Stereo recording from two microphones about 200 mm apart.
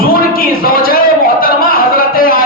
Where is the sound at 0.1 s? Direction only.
45° left (ahead or behind).